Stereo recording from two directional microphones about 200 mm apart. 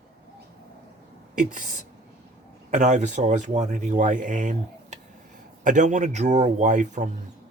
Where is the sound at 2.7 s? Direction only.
35° right (ahead or behind).